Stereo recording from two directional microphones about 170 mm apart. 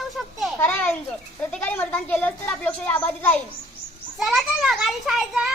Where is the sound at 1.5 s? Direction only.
10° left (ahead or behind).